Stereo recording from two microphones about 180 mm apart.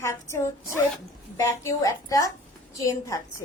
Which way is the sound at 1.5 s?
15° left (ahead or behind).